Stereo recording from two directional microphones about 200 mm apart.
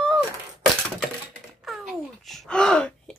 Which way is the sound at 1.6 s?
Centre (ahead or behind).